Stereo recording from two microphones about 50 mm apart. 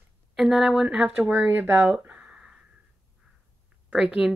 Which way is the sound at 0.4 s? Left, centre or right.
Centre.